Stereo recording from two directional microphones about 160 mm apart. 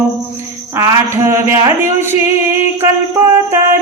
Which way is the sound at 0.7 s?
15° right (ahead or behind).